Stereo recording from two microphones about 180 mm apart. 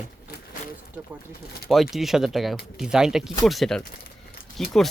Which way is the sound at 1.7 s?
Centre (ahead or behind).